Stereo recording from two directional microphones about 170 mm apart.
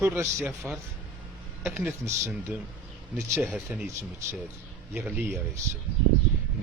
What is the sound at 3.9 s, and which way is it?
Speech, 15° right (ahead or behind).